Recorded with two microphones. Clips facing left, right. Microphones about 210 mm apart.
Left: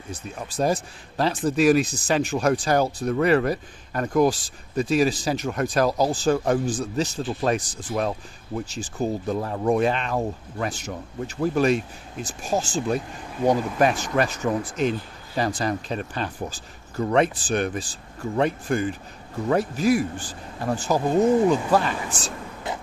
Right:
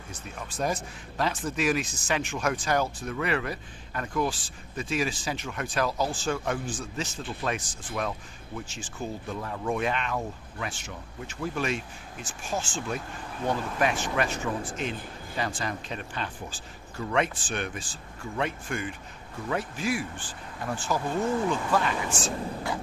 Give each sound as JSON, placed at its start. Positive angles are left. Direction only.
{"t": 0.1, "sound": "speech", "side_deg": 35}
{"t": 21.2, "sound": "speech", "side_deg": 20}
{"t": 21.5, "sound": "speech", "side_deg": 35}